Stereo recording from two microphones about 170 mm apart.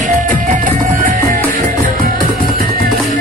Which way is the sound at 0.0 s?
50° right (ahead or behind).